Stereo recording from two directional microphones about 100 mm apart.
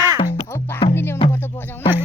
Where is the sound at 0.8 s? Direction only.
60° left (ahead or behind).